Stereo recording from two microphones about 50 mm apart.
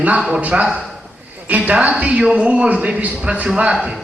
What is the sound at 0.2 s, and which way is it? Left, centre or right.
A man's voice, centre.